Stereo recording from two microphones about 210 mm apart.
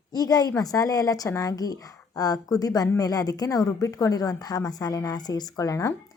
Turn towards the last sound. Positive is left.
turn(degrees=15)  # may be behind; listen again after turning